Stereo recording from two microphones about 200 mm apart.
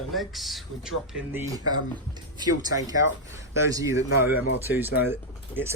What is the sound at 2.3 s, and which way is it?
Speech, 20° right (ahead or behind).